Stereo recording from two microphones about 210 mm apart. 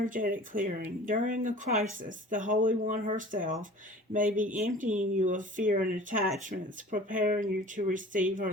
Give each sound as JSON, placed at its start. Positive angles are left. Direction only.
{"t": 0.0, "sound": "speech", "side_deg": -40}